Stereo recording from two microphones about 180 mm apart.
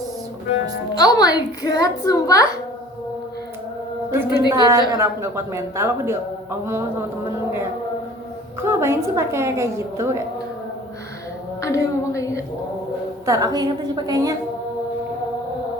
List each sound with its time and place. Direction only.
0.9 s a child's voice: 20° left (ahead or behind)
4.1 s speech: 15° right (ahead or behind)
8.6 s speech: 15° right (ahead or behind)
11.6 s a woman's voice: 15° left (ahead or behind)
13.2 s a woman's voice: 20° right (ahead or behind)